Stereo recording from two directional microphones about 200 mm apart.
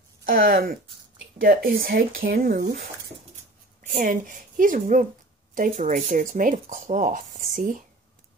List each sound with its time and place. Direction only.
0.2 s speech: 50° right (ahead or behind)
3.8 s a woman's voice: 40° right (ahead or behind)